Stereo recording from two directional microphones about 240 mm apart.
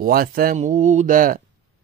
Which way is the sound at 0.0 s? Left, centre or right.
Right.